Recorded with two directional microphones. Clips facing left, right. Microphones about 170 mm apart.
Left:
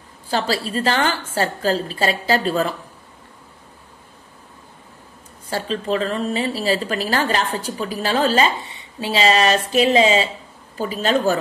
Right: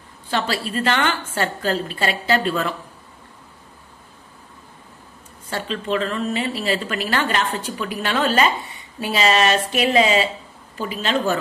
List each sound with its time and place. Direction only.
0.3 s a woman's voice: 35° left (ahead or behind)
5.5 s a woman's voice: 35° left (ahead or behind)